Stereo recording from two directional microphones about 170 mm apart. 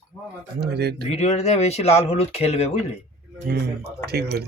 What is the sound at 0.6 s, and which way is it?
Speech, 75° right (ahead or behind).